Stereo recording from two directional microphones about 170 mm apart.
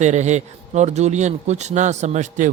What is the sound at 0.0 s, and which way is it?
A man's voice, 45° right (ahead or behind).